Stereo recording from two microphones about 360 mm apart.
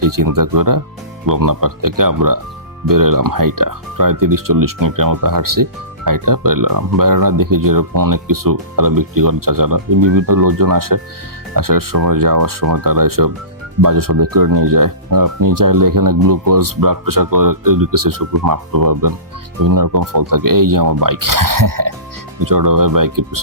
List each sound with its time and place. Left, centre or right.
0.0 s speech: right